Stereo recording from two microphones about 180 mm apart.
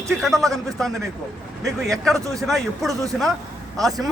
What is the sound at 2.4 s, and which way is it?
Speech, centre (ahead or behind).